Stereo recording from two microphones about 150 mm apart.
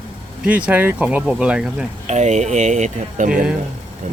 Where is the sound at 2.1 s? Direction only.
50° right (ahead or behind).